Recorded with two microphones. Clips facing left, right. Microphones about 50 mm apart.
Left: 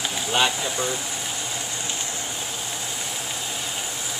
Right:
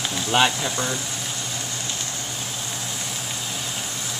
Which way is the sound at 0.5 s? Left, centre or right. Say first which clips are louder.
Even; centre.